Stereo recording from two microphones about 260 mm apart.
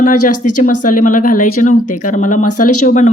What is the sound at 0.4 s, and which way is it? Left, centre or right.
Speech, left.